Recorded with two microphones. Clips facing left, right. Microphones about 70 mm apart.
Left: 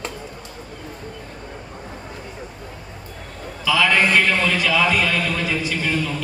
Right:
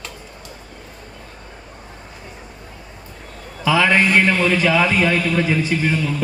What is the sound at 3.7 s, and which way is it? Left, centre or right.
A man's voice, right.